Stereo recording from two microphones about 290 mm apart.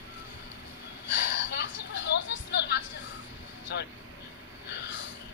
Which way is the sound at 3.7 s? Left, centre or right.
Left.